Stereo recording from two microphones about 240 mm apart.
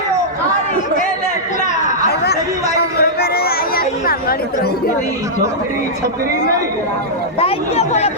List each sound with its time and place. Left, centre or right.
2.0 s chatter: left
3.0 s a sound: left
7.3 s speech: left